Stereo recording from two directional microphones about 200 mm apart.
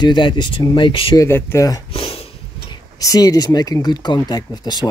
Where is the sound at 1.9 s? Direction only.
30° left (ahead or behind).